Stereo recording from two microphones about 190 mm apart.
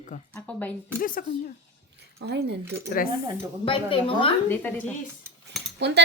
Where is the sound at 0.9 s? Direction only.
45° left (ahead or behind).